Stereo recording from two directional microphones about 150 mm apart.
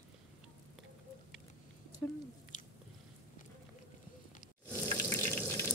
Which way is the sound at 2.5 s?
60° left (ahead or behind).